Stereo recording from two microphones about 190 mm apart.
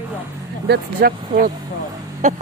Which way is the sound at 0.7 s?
50° right (ahead or behind).